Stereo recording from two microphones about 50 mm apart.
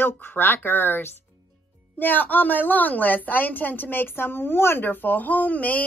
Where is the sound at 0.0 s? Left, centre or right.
Left.